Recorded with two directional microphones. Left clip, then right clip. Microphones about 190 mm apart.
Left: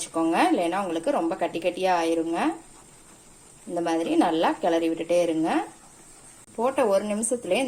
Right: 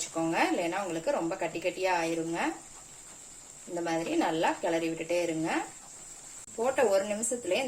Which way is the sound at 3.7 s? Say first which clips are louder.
Left 7 dB; 35° left (ahead or behind).